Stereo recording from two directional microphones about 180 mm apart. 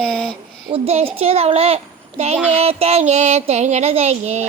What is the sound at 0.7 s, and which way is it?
Child singing, 35° right (ahead or behind).